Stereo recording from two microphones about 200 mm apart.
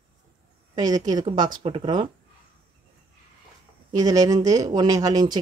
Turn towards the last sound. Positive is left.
turn(degrees=-20)  # may be behind; listen again after turning